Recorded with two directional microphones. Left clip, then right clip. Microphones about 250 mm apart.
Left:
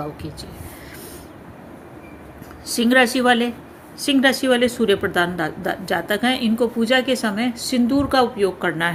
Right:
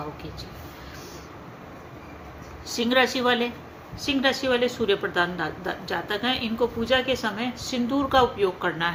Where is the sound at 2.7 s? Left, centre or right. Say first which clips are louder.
Left 5 dB; left.